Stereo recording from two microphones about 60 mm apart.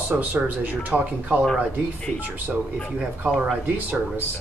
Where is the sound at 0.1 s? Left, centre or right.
Right.